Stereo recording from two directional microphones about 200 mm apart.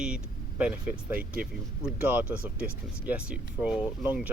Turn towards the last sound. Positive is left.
turn(degrees=-5)  # may be behind; listen again after turning